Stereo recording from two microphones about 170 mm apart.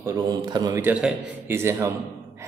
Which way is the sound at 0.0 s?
20° right (ahead or behind).